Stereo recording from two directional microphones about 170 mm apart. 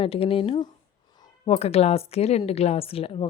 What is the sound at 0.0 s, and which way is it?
A woman's voice, 35° left (ahead or behind).